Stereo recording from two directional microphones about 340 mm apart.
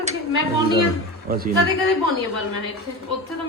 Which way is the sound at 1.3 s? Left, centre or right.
Right.